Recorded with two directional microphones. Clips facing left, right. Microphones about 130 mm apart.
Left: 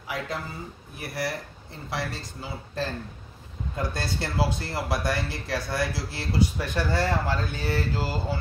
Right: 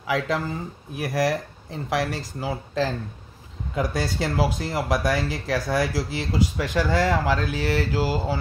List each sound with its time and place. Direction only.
0.1 s speech: 90° right